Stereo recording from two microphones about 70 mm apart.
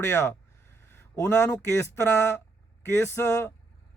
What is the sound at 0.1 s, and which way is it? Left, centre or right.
Speech, left.